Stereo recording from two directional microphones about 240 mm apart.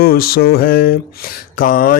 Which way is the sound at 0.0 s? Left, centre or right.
Left.